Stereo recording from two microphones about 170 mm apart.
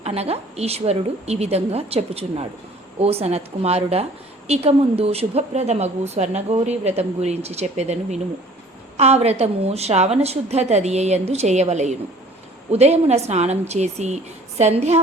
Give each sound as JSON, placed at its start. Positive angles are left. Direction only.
{"t": 0.0, "sound": "a woman's voice", "side_deg": -35}